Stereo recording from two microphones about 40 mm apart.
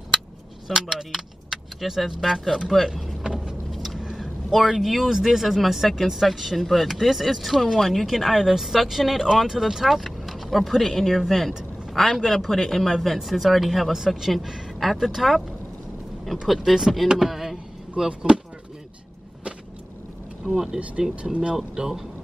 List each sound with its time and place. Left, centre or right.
0.7 s speech: centre
3.7 s a sound: centre
4.0 s vehicle: centre
4.7 s speech: centre
16.4 s speech: centre
18.0 s speech: right
20.5 s speech: centre
21.2 s speech: right
21.7 s speech: centre